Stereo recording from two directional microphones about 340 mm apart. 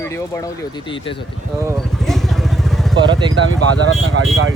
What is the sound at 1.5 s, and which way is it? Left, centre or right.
Vehicle, centre.